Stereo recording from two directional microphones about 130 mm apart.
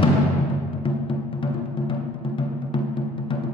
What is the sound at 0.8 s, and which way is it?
Music, 40° left (ahead or behind).